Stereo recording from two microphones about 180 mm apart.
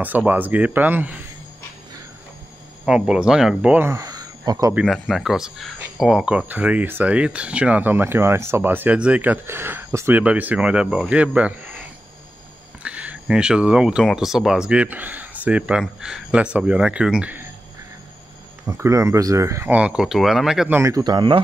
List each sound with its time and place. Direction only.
0.0 s speech: 10° right (ahead or behind)
2.8 s speech: 5° right (ahead or behind); by 4.7 s 20° right (ahead or behind)
4.7 s speech: centre (ahead or behind)
12.8 s speech: 5° right (ahead or behind)
18.7 s speech: 15° right (ahead or behind)